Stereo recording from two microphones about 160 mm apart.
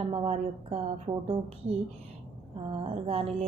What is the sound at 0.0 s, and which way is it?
A woman's voice, 35° right (ahead or behind).